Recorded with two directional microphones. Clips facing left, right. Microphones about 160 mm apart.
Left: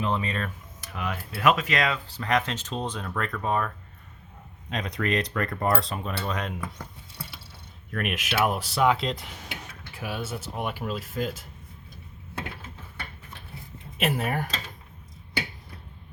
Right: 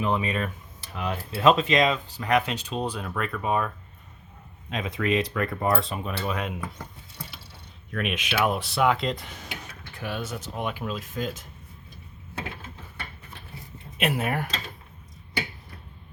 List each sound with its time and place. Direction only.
0.0 s speech: 15° right (ahead or behind)
0.8 s a sound: 30° right (ahead or behind)
1.3 s speech: 25° right (ahead or behind)
4.7 s speech: 5° right (ahead or behind)
7.9 s speech: centre (ahead or behind)
14.0 s speech: centre (ahead or behind)